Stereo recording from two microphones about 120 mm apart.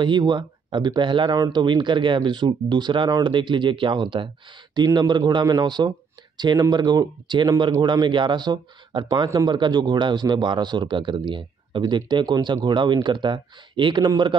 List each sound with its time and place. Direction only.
0.0 s speech: 40° right (ahead or behind)